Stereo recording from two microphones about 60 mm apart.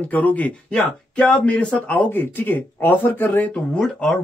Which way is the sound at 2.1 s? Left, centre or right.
Left.